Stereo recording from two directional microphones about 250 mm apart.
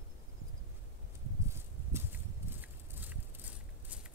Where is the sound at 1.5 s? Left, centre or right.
Centre.